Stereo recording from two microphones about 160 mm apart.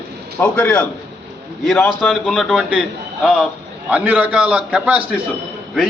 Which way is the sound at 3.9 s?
10° right (ahead or behind).